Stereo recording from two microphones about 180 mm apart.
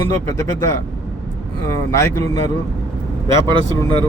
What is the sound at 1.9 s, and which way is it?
Speech, 15° left (ahead or behind).